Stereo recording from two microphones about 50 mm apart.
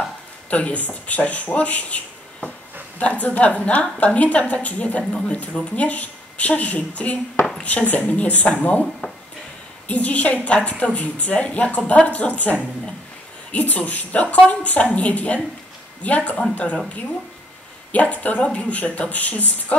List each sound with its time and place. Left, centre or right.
0.5 s a woman's voice: left
3.0 s a woman's voice: left
9.8 s a woman's voice: left
17.9 s a woman's voice: left